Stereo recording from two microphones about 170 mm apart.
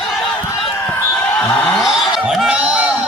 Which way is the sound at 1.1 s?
5° left (ahead or behind).